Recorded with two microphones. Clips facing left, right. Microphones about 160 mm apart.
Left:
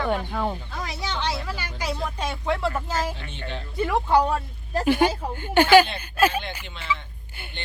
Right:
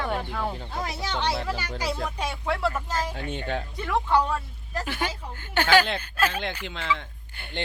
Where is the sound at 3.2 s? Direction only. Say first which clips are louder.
Right 5 dB; 45° right (ahead or behind).